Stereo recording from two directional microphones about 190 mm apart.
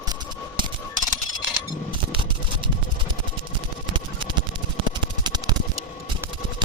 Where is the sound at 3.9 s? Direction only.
25° right (ahead or behind).